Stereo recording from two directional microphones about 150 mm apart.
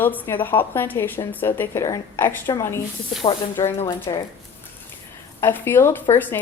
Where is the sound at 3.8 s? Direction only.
20° left (ahead or behind).